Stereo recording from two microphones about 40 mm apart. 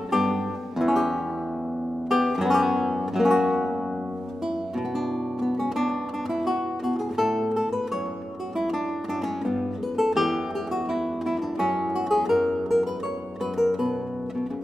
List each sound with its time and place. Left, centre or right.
0.1 s music: centre
2.0 s guitar: centre
5.4 s music: centre